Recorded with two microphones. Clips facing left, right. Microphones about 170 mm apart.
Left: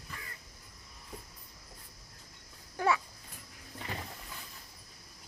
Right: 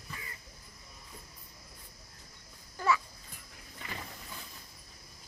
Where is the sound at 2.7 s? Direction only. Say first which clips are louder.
Left 1 dB; 60° left (ahead or behind).